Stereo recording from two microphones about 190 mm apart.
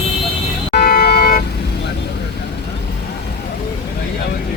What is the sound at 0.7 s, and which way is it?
Vehicle, 55° left (ahead or behind).